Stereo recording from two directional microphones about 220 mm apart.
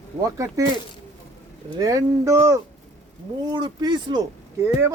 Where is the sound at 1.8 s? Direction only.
15° right (ahead or behind).